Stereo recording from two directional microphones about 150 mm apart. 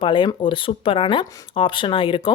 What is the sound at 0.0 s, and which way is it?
Speech, 35° left (ahead or behind).